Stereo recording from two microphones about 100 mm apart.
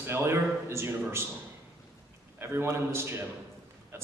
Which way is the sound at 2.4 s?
25° right (ahead or behind).